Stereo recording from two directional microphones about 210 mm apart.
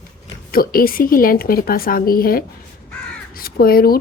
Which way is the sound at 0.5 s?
45° left (ahead or behind).